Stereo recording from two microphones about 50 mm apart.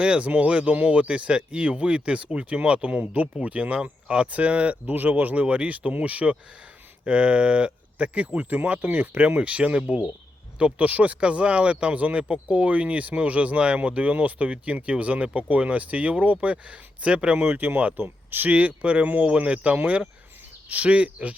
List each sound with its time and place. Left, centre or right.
0.0 s speech: right
17.4 s speech: right
18.5 s speech: right